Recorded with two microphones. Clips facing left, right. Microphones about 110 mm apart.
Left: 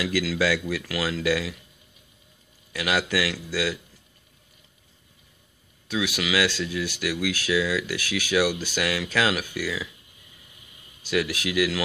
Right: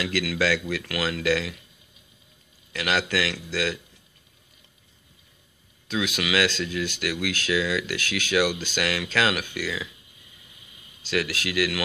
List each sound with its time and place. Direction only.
0.0 s speech: 10° left (ahead or behind)
2.7 s speech: 10° left (ahead or behind)
5.9 s speech: 10° left (ahead or behind)
11.0 s speech: 15° left (ahead or behind)